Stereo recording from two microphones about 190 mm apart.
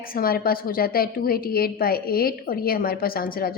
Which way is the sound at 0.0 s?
50° left (ahead or behind).